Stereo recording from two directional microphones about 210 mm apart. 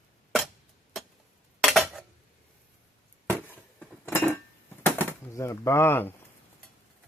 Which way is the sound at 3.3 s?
5° left (ahead or behind).